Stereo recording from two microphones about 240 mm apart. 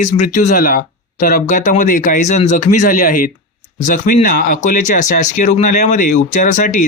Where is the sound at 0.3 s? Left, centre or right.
Left.